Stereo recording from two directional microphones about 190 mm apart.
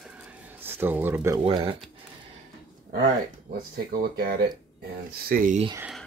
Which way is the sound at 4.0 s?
55° right (ahead or behind).